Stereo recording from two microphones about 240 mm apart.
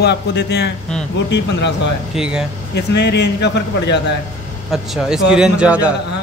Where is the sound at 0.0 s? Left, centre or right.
Left.